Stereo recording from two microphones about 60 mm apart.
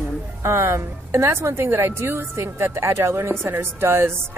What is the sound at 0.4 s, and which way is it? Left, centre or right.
A woman's voice, right.